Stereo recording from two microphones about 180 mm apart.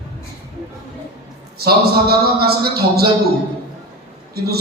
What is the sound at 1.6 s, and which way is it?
A man's voice, 60° right (ahead or behind).